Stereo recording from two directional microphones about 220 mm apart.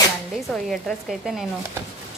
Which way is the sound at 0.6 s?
Centre (ahead or behind).